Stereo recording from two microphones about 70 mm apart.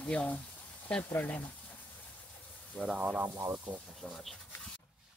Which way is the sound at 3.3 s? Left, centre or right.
Right.